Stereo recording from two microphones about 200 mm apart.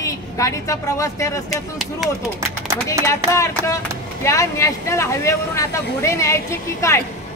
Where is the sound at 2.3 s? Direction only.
15° right (ahead or behind).